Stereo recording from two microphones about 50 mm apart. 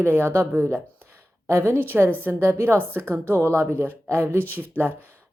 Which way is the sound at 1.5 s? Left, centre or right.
Right.